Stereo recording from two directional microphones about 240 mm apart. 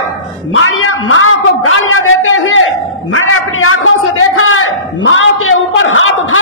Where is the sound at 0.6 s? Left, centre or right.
Left.